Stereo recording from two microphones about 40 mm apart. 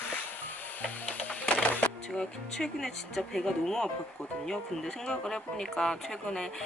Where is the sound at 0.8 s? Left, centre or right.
Left.